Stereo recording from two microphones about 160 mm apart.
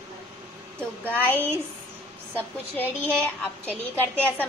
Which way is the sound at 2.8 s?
10° left (ahead or behind).